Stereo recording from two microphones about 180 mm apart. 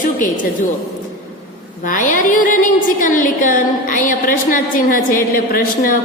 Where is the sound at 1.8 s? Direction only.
50° left (ahead or behind).